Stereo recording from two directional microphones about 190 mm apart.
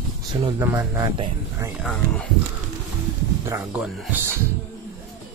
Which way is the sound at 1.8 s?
5° left (ahead or behind).